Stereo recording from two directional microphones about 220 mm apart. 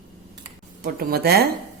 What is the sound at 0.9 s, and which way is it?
Speech, 45° right (ahead or behind).